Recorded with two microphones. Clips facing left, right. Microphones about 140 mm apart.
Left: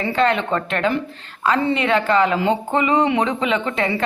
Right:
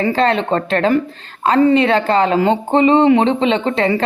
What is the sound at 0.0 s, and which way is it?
Speech, 35° right (ahead or behind).